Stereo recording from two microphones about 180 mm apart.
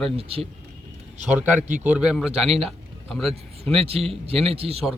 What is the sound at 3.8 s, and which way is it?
A man's voice, 35° right (ahead or behind).